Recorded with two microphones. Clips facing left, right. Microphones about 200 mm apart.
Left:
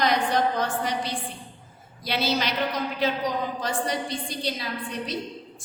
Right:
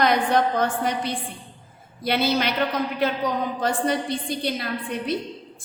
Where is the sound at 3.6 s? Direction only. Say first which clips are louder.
Right 5 dB; 55° right (ahead or behind).